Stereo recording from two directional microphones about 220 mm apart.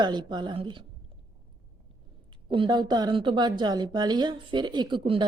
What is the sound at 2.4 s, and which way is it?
A woman's voice, 20° right (ahead or behind).